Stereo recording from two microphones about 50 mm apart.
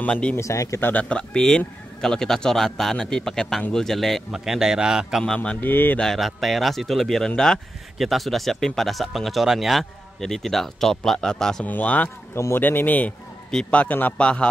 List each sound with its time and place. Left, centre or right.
0.1 s a man's voice: left
0.4 s speech: left
0.7 s speech: left
1.0 s a man's voice: centre
4.3 s a man's voice: centre
5.2 s a man's voice: centre
5.6 s speech: left
6.1 s a man's voice: centre
8.0 s a man's voice: centre
11.6 s speech: left
12.5 s a man's voice: left